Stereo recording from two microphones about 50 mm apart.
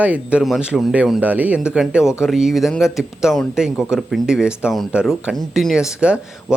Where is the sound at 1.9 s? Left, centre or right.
Centre.